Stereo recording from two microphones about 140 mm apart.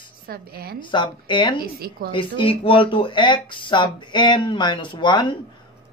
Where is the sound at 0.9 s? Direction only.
35° left (ahead or behind).